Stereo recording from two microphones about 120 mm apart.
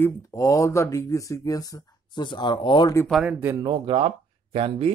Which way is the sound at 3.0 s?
Centre (ahead or behind).